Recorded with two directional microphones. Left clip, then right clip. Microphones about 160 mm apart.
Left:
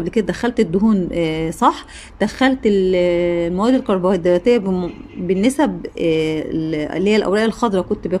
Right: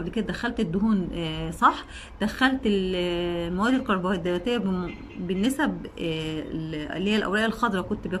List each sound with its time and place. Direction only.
0.0 s speech: 35° left (ahead or behind)